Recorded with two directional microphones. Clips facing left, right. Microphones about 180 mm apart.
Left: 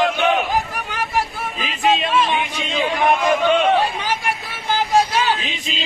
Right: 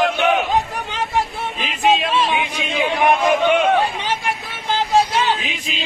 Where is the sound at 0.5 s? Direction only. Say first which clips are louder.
Right 2 dB; 20° right (ahead or behind).